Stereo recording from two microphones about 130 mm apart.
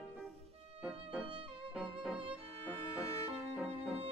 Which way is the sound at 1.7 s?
5° right (ahead or behind).